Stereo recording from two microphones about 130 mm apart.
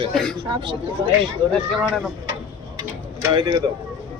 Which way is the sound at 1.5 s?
Centre (ahead or behind).